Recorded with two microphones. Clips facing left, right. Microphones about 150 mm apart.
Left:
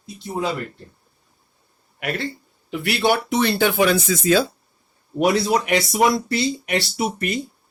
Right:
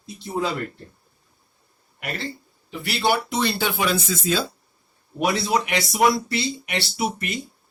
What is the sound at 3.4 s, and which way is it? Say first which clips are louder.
Speech: left 5 dB; 55° left (ahead or behind).